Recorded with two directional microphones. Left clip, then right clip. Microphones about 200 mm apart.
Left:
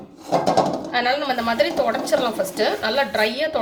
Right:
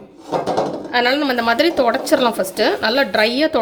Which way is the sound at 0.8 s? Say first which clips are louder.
Right 4 dB; 50° right (ahead or behind).